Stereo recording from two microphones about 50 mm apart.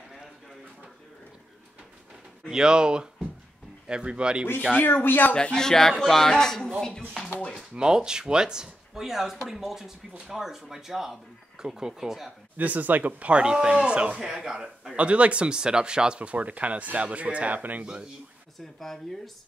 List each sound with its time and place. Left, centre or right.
2.5 s speech: centre
4.8 s speech: left
5.3 s speech: centre
7.2 s speech: left
7.7 s speech: centre
12.5 s speech: right
14.2 s speech: centre
15.0 s speech: right
18.8 s speech: centre